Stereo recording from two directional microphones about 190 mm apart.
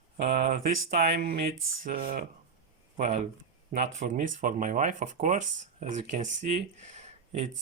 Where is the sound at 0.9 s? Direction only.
50° right (ahead or behind).